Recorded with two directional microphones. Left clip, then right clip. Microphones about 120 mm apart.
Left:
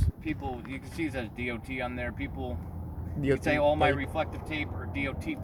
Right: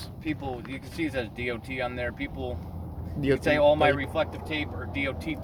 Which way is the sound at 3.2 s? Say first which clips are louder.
Right 3 dB; 10° right (ahead or behind).